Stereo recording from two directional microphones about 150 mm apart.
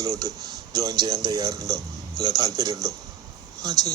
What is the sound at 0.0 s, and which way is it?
Speech, 25° right (ahead or behind).